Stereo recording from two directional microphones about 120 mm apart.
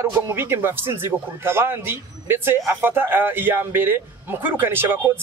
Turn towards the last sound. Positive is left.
turn(degrees=-20)  # may be behind; listen again after turning